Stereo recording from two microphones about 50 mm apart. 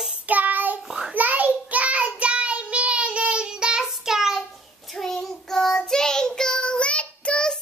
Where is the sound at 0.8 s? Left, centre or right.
Centre.